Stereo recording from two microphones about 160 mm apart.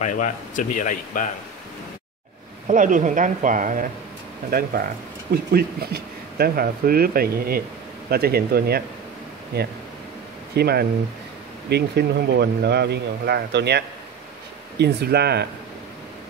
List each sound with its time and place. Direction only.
0.0 s speech: 50° left (ahead or behind)
2.7 s speech: 55° right (ahead or behind)
4.5 s speech: 65° right (ahead or behind)
9.5 s speech: 90° right